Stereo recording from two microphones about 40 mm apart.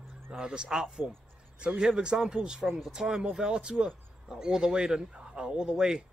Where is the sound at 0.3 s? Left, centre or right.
Centre.